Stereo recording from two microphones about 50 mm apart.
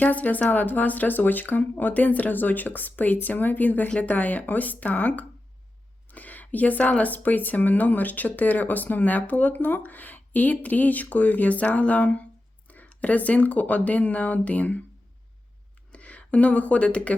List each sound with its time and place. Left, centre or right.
0.0 s speech: left
15.9 s speech: left